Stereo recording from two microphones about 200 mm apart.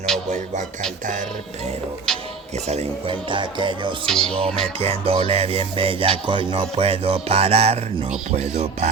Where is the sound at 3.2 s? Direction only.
25° right (ahead or behind).